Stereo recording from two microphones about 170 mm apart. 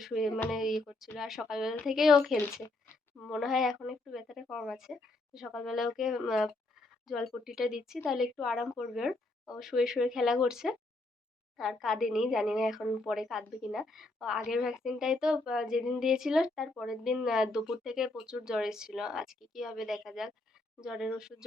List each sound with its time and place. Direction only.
0.0 s speech: centre (ahead or behind)